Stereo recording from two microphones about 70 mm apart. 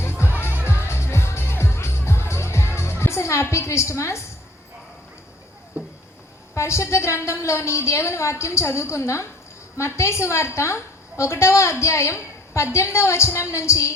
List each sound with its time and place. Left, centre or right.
0.6 s music: left
3.5 s a woman's voice: left
6.5 s a woman's voice: left